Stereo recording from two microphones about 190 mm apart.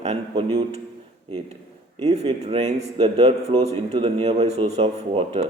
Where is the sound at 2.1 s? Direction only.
35° right (ahead or behind).